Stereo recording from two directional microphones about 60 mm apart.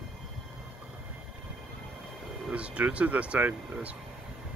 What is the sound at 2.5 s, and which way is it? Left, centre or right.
Speech, right.